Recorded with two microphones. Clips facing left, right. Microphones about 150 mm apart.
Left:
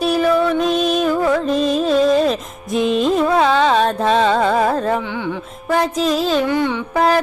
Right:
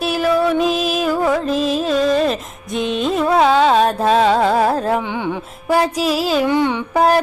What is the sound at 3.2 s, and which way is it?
Carnatic music, 10° right (ahead or behind).